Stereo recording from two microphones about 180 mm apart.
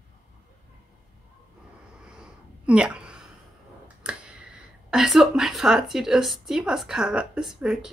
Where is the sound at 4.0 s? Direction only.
5° right (ahead or behind).